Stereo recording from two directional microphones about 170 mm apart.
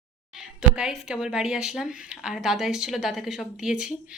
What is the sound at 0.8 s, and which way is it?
A woman's voice, 5° right (ahead or behind).